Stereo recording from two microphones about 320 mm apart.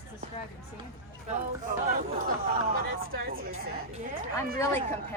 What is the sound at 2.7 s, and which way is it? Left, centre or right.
Speech, right.